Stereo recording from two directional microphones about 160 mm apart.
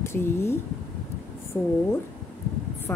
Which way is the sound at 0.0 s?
15° left (ahead or behind).